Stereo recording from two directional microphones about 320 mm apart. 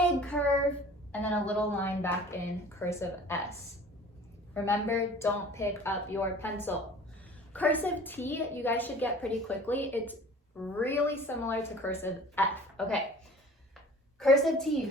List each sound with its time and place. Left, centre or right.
0.2 s child singing: centre
1.1 s a woman's voice: centre
4.5 s a woman's voice: centre
14.2 s a woman's voice: centre